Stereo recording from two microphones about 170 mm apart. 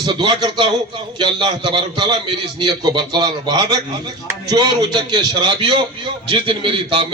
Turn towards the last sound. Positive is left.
turn(degrees=-30)  # may be behind; listen again after turning